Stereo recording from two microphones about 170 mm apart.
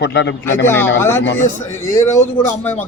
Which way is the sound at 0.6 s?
15° left (ahead or behind).